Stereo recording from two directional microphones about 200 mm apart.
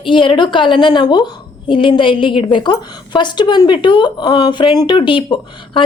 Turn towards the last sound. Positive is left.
turn(degrees=25)  # may be behind; listen again after turning